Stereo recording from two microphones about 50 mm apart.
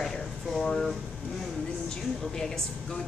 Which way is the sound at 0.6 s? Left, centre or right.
Centre.